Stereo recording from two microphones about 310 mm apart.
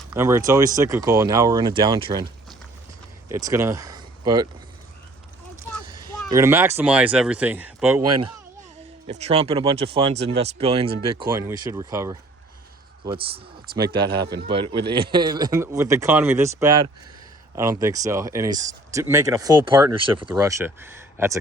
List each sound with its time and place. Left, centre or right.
0.1 s speech: centre
3.2 s speech: centre
6.3 s speech: centre
9.0 s speech: right